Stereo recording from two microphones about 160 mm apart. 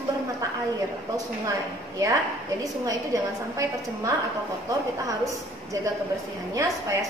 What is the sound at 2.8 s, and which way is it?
A woman's voice, 20° right (ahead or behind).